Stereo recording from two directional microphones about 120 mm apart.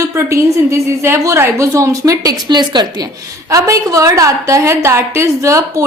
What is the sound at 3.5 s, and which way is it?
A woman's voice, 25° right (ahead or behind).